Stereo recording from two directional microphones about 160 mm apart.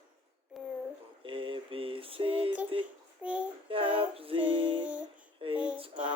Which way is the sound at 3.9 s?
35° right (ahead or behind).